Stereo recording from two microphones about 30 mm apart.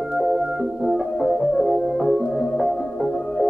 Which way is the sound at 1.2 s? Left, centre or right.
Centre.